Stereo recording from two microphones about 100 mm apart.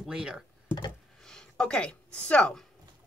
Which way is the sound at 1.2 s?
5° left (ahead or behind).